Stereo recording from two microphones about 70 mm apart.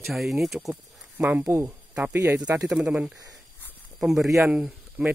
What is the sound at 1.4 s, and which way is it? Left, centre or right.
Speech, right.